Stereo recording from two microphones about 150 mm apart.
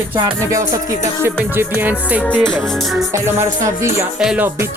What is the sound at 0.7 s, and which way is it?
Music, 20° right (ahead or behind).